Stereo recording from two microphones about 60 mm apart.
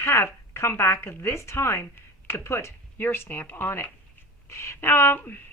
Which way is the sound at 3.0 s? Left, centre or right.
Left.